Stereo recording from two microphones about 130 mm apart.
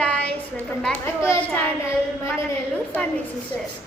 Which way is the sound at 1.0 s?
20° left (ahead or behind).